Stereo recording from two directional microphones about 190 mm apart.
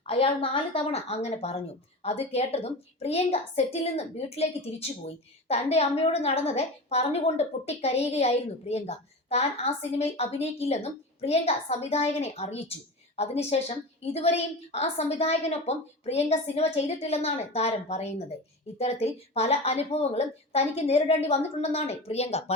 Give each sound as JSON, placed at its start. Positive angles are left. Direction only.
{"t": 0.1, "sound": "a woman's voice", "side_deg": 30}